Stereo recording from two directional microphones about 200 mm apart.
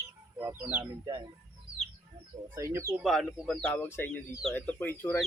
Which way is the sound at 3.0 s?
Centre (ahead or behind).